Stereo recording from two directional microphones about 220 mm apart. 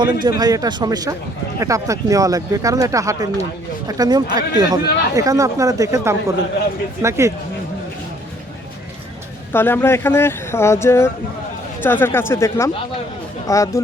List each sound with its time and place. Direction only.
0.0 s speech: 20° right (ahead or behind)
9.5 s speech: 10° left (ahead or behind)